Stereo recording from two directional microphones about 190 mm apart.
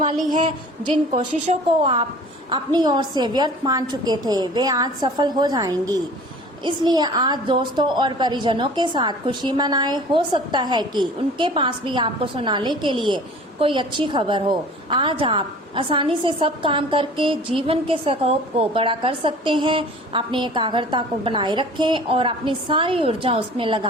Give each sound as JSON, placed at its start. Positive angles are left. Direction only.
{"t": 0.9, "sound": "a woman's voice", "side_deg": -30}